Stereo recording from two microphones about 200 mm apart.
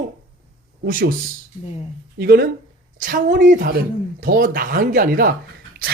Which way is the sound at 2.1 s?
50° right (ahead or behind).